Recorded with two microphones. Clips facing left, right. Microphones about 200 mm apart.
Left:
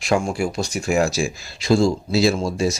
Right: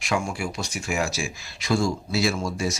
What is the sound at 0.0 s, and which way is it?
Speech, 35° left (ahead or behind).